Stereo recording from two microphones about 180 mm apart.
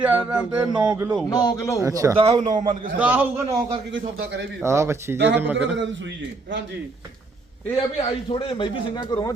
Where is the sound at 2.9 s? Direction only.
10° right (ahead or behind).